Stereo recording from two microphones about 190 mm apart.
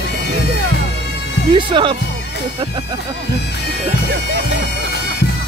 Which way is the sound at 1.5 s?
25° right (ahead or behind).